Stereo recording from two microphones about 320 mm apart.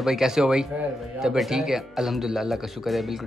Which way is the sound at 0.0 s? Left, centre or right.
Centre.